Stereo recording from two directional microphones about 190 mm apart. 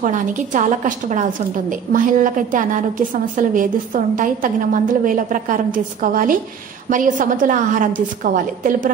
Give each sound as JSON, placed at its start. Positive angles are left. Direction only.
{"t": 0.0, "sound": "a woman's voice", "side_deg": -40}